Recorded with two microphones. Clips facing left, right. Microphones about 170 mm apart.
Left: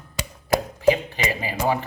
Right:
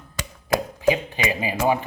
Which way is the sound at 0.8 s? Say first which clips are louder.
Left 3 dB; 15° right (ahead or behind).